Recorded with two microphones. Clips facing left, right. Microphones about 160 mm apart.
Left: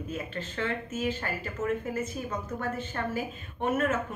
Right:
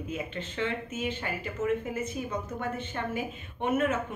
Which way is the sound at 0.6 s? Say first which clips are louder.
Left 1 dB; 20° right (ahead or behind).